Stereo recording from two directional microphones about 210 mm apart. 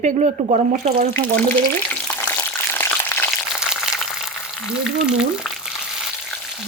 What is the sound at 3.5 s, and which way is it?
Boiling, centre (ahead or behind).